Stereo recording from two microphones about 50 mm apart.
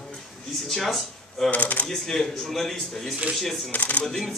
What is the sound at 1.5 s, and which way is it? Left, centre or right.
Speech, left.